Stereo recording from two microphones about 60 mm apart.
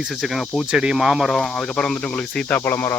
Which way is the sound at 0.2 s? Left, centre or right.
Centre.